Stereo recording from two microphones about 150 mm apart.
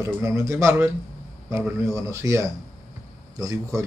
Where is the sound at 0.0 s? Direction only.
20° right (ahead or behind).